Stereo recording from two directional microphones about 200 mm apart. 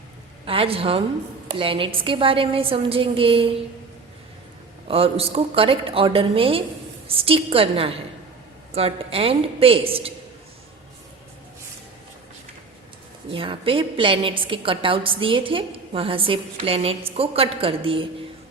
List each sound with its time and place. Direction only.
0.4 s a woman's voice: 25° right (ahead or behind)
4.9 s a woman's voice: 30° right (ahead or behind)
13.3 s a woman's voice: 25° right (ahead or behind)